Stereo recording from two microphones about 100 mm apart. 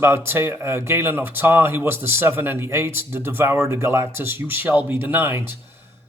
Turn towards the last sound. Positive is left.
turn(degrees=-25)  # may be behind; listen again after turning